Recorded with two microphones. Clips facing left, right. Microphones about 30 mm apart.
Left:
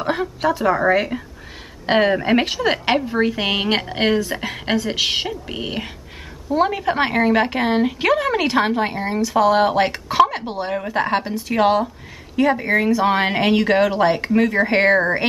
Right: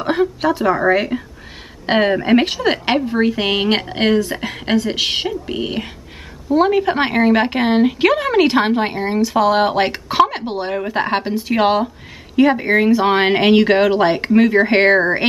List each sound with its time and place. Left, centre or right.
0.0 s a woman's voice: centre